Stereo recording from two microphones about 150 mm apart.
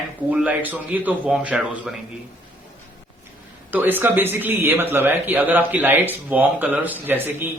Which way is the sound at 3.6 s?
10° right (ahead or behind).